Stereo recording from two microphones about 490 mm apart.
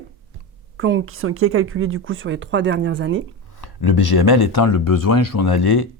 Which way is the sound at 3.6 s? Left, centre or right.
Left.